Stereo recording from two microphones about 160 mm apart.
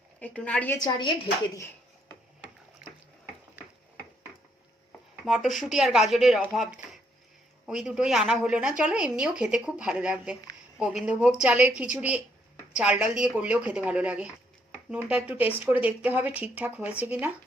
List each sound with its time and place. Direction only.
0.2 s a woman's voice: 10° left (ahead or behind)
0.8 s a woman's voice: 30° left (ahead or behind)
5.2 s a woman's voice: 5° right (ahead or behind)